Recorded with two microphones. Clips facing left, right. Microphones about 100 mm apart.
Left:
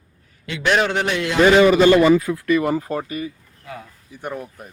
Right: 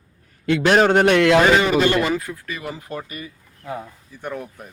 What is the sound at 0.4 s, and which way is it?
Speech, 50° right (ahead or behind).